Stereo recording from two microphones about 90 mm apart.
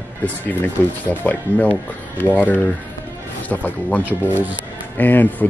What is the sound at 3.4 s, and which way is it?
Speech, 20° left (ahead or behind).